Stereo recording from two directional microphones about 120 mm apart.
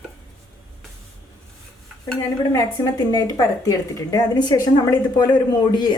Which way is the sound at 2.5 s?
30° left (ahead or behind).